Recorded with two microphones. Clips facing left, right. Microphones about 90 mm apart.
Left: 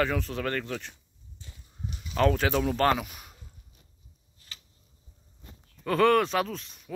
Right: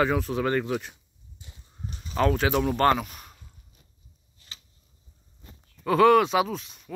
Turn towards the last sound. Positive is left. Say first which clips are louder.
# right 4 dB
turn(degrees=0)  # may be behind; listen again after turning